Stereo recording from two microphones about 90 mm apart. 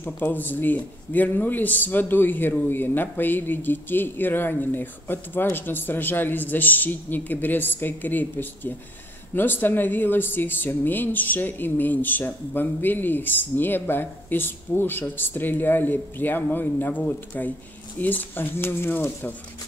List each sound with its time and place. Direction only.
0.0 s speech: 20° left (ahead or behind)